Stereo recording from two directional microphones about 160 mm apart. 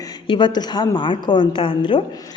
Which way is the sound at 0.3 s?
30° left (ahead or behind).